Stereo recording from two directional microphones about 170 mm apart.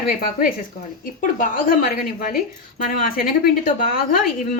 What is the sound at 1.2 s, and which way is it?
A woman's voice, 55° left (ahead or behind).